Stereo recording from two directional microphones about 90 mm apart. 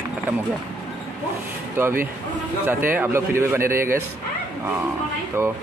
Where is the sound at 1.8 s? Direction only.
25° right (ahead or behind).